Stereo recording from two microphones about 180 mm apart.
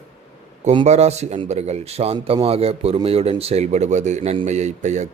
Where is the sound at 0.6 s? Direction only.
35° right (ahead or behind).